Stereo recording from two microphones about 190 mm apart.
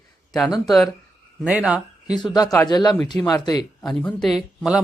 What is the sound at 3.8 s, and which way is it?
Speech, 5° left (ahead or behind).